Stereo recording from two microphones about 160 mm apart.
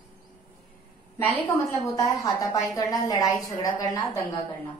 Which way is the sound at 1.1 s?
20° left (ahead or behind).